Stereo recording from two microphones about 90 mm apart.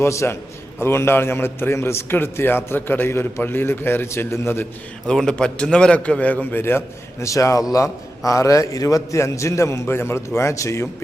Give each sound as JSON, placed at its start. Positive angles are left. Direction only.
{"t": 0.0, "sound": "a man's voice", "side_deg": 30}
{"t": 5.0, "sound": "a man's voice", "side_deg": 10}